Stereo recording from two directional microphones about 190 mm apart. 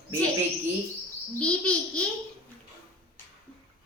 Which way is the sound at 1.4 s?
5° left (ahead or behind).